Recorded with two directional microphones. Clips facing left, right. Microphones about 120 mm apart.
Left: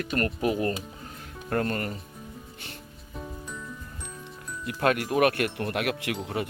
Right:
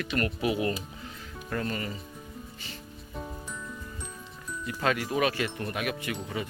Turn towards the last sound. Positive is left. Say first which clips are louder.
# left 3 dB
turn(degrees=70)  # may be behind; listen again after turning